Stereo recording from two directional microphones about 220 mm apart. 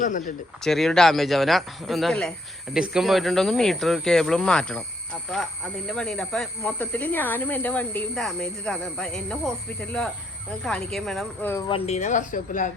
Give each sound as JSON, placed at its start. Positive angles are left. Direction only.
{"t": 0.0, "sound": "speech", "side_deg": 35}
{"t": 0.6, "sound": "speech", "side_deg": 0}
{"t": 10.6, "sound": "speech", "side_deg": 0}
{"t": 11.7, "sound": "speech", "side_deg": 30}